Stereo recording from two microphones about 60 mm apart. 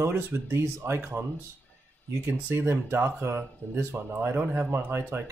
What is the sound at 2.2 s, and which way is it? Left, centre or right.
Speech, right.